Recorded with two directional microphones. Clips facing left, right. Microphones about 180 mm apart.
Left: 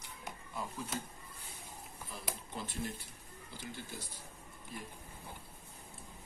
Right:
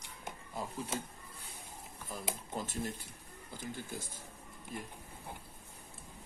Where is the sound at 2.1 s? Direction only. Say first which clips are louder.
Right 5 dB; 45° right (ahead or behind).